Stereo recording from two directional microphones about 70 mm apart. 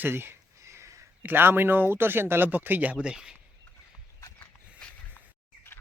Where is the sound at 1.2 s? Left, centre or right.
Right; by 3.4 s centre.